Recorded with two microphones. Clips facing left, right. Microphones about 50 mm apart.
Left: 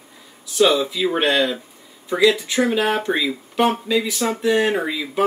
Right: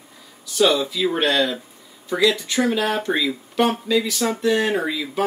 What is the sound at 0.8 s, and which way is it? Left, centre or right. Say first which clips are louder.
Speech: left 1 dB; centre.